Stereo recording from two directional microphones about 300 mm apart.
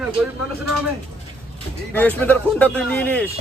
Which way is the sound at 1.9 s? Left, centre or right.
Centre.